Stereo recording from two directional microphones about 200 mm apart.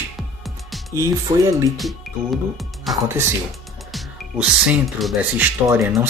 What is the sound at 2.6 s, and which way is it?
Speech, centre (ahead or behind).